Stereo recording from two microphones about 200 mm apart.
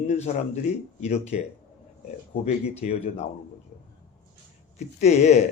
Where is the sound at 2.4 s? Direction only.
35° left (ahead or behind).